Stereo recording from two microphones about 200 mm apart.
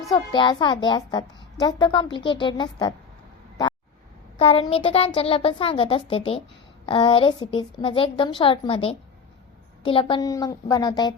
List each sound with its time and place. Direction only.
0.1 s a child's voice: 20° left (ahead or behind)
4.4 s a child's voice: 30° left (ahead or behind)